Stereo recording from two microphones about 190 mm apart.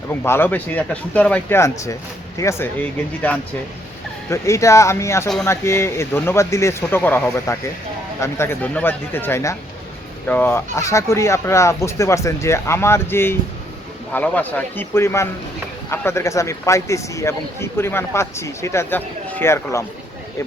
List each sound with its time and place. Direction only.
0.1 s a man's voice: 10° left (ahead or behind)